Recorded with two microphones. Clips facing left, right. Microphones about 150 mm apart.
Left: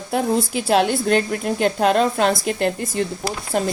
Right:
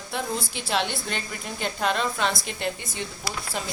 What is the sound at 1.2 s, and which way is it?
A woman's voice, 60° left (ahead or behind).